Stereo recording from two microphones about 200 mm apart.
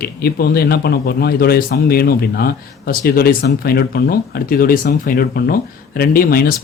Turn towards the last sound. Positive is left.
turn(degrees=50)  # may be behind; listen again after turning